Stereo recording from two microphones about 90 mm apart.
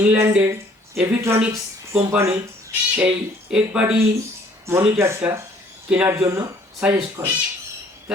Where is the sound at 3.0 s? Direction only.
10° right (ahead or behind).